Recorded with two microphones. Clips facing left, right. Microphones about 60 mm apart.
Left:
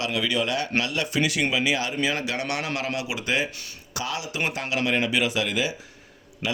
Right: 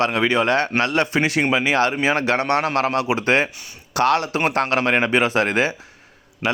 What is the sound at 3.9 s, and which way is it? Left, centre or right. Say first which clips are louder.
A man's voice: right 11 dB; right.